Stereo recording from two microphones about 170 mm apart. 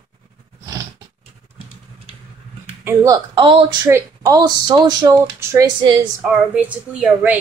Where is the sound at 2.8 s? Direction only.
20° right (ahead or behind).